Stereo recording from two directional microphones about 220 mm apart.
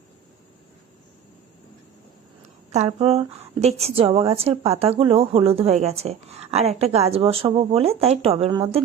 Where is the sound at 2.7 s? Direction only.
30° right (ahead or behind).